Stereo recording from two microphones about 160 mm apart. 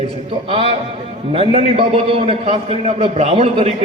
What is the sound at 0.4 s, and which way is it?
A man's voice, 35° right (ahead or behind).